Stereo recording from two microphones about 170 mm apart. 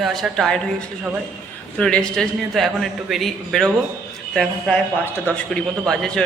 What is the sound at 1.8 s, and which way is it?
A man's voice, 5° left (ahead or behind).